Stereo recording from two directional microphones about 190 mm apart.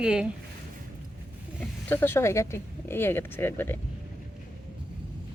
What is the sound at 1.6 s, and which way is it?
Speech, 10° left (ahead or behind).